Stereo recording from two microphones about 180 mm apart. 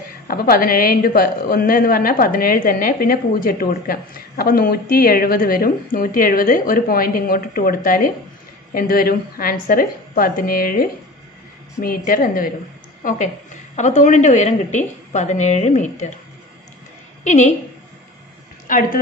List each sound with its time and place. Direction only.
0.3 s a woman's voice: 55° left (ahead or behind)
17.2 s a woman's voice: 40° left (ahead or behind)
18.7 s a woman's voice: 50° left (ahead or behind)